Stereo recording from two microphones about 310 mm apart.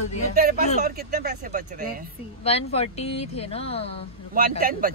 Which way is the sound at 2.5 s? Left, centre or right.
Centre.